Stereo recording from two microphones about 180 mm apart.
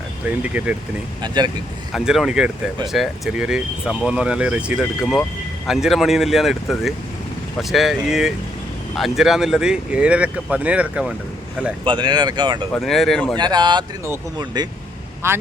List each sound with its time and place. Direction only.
0.3 s speech: 5° right (ahead or behind)
1.2 s speech: 25° right (ahead or behind)
1.9 s speech: centre (ahead or behind)
11.9 s speech: 25° right (ahead or behind)
12.7 s speech: centre (ahead or behind)
13.3 s speech: 25° right (ahead or behind)